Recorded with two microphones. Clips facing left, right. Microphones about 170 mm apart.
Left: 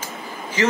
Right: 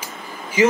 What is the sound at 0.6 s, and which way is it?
Speech, 10° right (ahead or behind).